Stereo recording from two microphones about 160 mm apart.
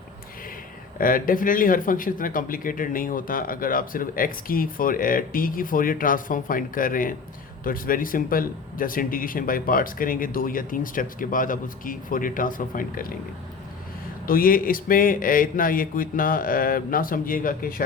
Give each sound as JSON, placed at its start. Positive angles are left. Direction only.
{"t": 0.9, "sound": "speech", "side_deg": 60}
{"t": 14.3, "sound": "speech", "side_deg": 65}